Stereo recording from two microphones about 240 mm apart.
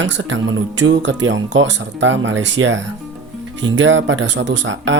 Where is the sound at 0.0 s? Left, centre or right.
Right.